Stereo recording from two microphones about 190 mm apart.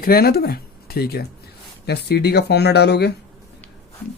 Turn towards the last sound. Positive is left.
turn(degrees=60)  # may be behind; listen again after turning